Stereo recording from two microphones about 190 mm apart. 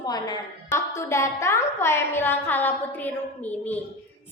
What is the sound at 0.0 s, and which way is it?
A woman's voice, 20° left (ahead or behind).